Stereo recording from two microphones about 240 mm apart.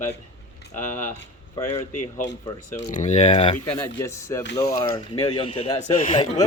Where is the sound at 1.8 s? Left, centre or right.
Left.